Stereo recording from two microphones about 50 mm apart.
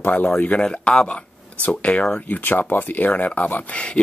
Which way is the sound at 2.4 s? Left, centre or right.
Left.